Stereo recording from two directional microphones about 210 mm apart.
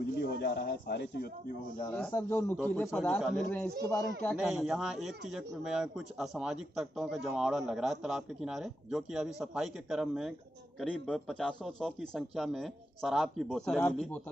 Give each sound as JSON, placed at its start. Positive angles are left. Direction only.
{"t": 0.2, "sound": "speech", "side_deg": 50}
{"t": 1.9, "sound": "a man's voice", "side_deg": 5}